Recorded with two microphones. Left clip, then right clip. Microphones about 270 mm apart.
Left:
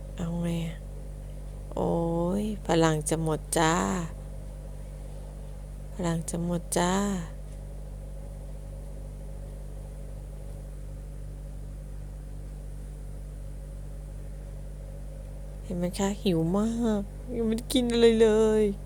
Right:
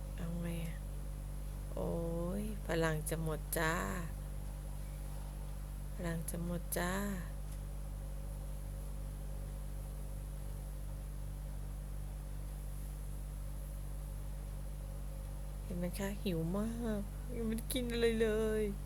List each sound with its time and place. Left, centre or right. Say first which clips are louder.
0.2 s a sound: left 12 dB; centre
6.0 s speech: left 11 dB; centre
15.8 s speech: left 12 dB; centre